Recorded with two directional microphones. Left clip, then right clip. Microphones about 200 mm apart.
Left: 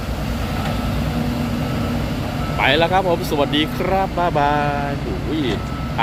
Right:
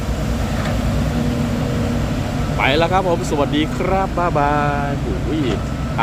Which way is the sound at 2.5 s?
Centre (ahead or behind).